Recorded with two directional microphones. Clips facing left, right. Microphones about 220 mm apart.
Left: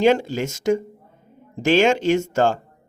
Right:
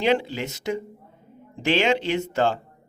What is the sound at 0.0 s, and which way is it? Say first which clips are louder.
Speech: left 5 dB; 45° left (ahead or behind).